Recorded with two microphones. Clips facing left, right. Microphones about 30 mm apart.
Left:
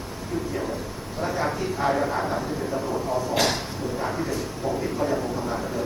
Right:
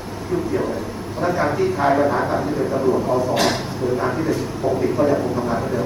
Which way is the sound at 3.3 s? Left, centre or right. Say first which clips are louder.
Right 5 dB; centre.